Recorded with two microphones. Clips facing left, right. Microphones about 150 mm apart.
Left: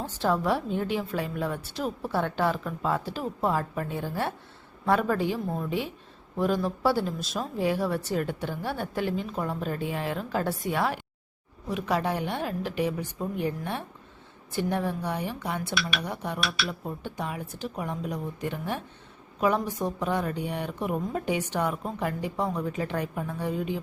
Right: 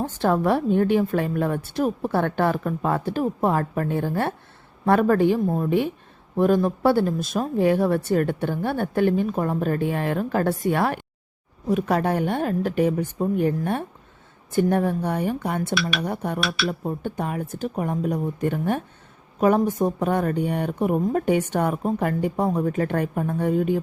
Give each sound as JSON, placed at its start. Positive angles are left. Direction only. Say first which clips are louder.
{"t": 0.0, "sound": "speech", "louder": "right 5 dB", "side_deg": -55}